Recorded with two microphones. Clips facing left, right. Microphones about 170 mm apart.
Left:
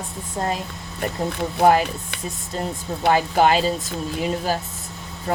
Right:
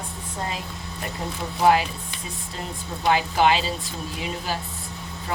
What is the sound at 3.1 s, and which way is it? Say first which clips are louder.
Speech: left 3 dB; 45° left (ahead or behind).